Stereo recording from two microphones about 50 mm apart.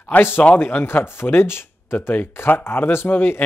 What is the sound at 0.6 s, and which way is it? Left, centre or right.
Speech, left.